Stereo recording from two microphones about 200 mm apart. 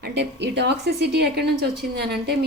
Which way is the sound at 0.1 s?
60° right (ahead or behind).